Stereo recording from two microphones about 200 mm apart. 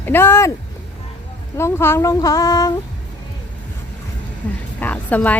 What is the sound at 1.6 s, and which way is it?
Speech, 15° left (ahead or behind).